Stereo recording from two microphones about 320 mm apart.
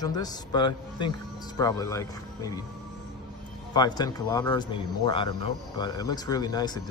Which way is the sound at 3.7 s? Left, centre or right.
Centre.